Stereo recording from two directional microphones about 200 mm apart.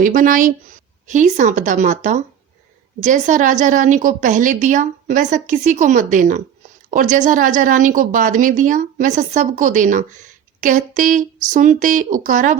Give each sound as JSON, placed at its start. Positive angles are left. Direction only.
{"t": 0.0, "sound": "a woman's voice", "side_deg": -40}